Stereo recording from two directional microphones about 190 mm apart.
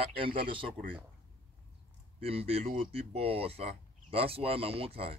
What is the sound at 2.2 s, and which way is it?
Speech, 30° right (ahead or behind).